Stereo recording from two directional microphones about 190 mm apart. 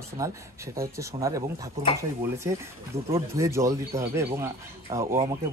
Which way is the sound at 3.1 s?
15° right (ahead or behind).